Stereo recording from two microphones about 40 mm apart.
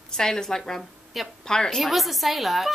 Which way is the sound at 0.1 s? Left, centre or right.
Centre.